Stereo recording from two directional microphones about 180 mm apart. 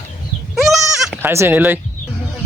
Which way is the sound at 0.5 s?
Centre (ahead or behind).